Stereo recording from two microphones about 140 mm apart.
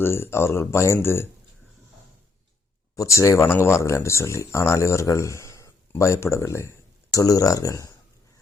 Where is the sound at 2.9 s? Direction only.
20° left (ahead or behind).